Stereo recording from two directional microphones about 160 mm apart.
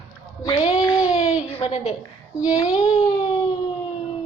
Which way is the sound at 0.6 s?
45° left (ahead or behind).